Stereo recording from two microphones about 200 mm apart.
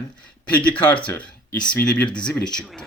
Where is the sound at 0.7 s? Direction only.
5° left (ahead or behind).